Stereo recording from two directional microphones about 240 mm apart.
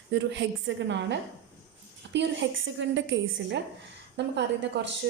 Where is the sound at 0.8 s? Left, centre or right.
Right.